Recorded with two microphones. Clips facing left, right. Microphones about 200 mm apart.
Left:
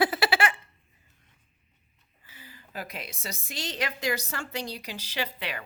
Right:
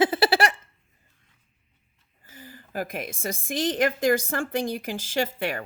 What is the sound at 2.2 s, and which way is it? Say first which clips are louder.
A woman's voice: right 7 dB; 45° right (ahead or behind).